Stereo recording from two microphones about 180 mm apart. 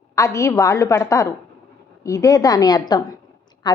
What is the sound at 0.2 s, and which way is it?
A woman's voice, 15° left (ahead or behind).